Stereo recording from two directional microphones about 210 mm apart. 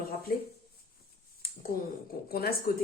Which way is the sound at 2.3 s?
45° left (ahead or behind).